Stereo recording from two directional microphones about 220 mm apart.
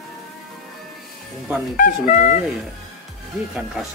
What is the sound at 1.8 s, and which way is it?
Speech, 35° left (ahead or behind).